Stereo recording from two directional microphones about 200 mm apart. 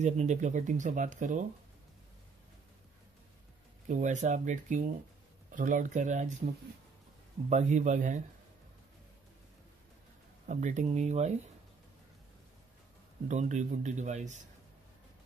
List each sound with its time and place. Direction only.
0.0 s speech: 35° right (ahead or behind)
3.8 s speech: 35° right (ahead or behind)
10.4 s speech: 40° right (ahead or behind)
13.3 s speech: 35° right (ahead or behind)